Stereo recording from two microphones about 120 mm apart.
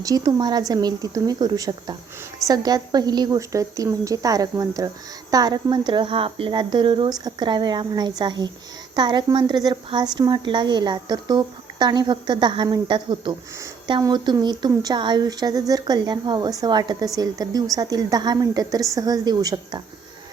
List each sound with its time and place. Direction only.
0.0 s a woman's voice: 30° right (ahead or behind)